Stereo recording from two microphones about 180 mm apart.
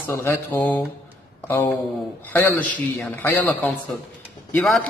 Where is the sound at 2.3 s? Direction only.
10° left (ahead or behind).